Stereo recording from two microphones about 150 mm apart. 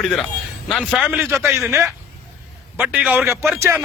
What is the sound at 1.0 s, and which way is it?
Speech, 10° right (ahead or behind).